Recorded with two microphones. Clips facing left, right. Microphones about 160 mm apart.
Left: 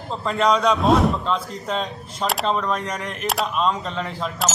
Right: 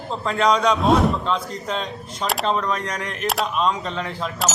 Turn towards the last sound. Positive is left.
turn(degrees=0)  # may be behind; listen again after turning